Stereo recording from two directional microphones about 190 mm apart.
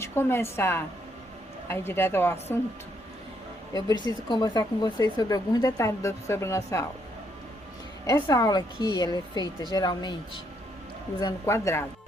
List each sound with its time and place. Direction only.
0.0 s a woman's voice: 15° left (ahead or behind)
3.7 s a woman's voice: 20° left (ahead or behind)
8.0 s a woman's voice: 15° left (ahead or behind)